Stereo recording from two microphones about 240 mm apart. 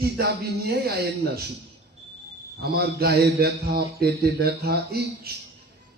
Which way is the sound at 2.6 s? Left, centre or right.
Right.